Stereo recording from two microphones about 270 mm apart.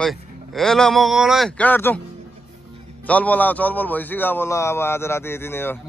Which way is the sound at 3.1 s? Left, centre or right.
Centre.